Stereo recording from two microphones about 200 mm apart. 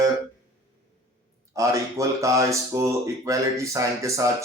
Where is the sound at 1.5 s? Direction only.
15° right (ahead or behind).